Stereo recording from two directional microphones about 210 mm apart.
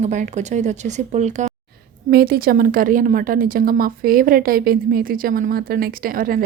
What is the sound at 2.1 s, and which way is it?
A woman's voice, 45° right (ahead or behind).